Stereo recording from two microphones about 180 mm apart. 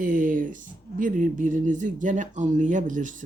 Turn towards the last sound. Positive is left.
turn(degrees=-45)  # may be behind; listen again after turning